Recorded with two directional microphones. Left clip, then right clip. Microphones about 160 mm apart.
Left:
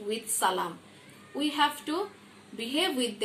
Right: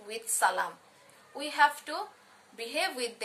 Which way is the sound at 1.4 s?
Centre (ahead or behind).